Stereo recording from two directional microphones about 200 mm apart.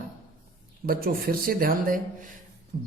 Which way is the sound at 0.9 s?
45° right (ahead or behind).